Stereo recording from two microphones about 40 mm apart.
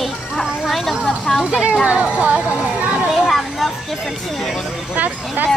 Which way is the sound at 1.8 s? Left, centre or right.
Right.